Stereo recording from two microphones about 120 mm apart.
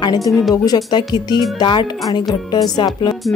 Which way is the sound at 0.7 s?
35° left (ahead or behind).